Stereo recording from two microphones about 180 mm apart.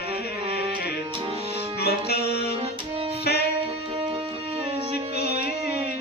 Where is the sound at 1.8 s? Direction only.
65° left (ahead or behind).